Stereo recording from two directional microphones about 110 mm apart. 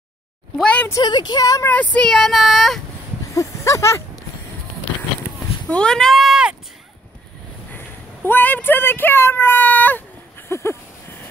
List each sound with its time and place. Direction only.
0.6 s a sound: 10° left (ahead or behind)
1.0 s speech: 40° left (ahead or behind)
1.6 s speech: 15° left (ahead or behind)
3.3 s speech: 25° left (ahead or behind)
5.7 s speech: 10° left (ahead or behind)
7.7 s speech: 20° left (ahead or behind)
10.5 s a sound: 25° left (ahead or behind)